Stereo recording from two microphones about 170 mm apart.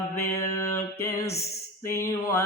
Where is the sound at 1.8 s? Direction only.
15° left (ahead or behind).